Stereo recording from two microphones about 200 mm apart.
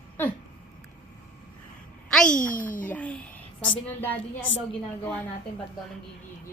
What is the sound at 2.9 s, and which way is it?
Speech, 10° left (ahead or behind).